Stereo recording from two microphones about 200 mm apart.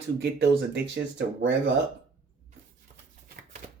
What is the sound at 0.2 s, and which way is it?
Speech, 60° right (ahead or behind).